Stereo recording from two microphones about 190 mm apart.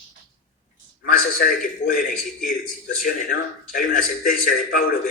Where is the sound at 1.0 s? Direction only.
45° left (ahead or behind).